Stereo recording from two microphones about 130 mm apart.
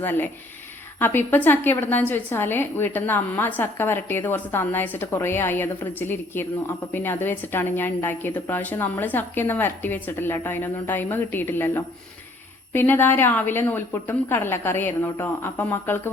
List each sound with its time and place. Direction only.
0.0 s a woman's voice: 15° left (ahead or behind)